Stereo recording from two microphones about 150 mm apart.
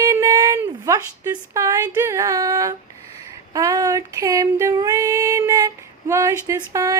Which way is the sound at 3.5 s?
25° right (ahead or behind).